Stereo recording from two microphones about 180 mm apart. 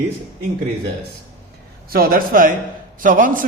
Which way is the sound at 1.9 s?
55° right (ahead or behind).